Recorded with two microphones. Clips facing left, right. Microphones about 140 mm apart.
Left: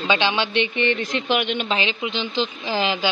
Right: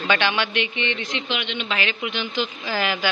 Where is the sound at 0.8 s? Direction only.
45° left (ahead or behind).